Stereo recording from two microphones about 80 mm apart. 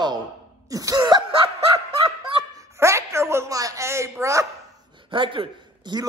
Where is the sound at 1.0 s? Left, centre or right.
Right.